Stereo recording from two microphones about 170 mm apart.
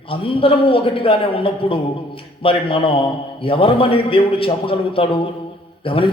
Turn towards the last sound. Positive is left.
turn(degrees=30)  # may be behind; listen again after turning